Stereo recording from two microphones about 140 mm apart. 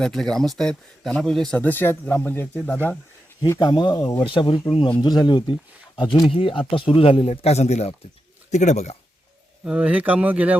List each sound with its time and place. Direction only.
0.0 s speech: 5° left (ahead or behind)
3.4 s speech: 25° left (ahead or behind)
4.3 s speech: 35° left (ahead or behind); by 9.0 s 50° left (ahead or behind)
9.6 s speech: 10° right (ahead or behind)